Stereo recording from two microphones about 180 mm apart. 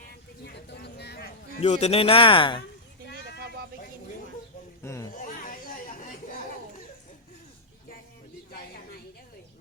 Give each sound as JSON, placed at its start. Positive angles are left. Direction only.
{"t": 0.4, "sound": "vehicle", "side_deg": 65}
{"t": 1.6, "sound": "a man's voice", "side_deg": 40}
{"t": 4.8, "sound": "a sound", "side_deg": 15}
{"t": 5.1, "sound": "chatter", "side_deg": 45}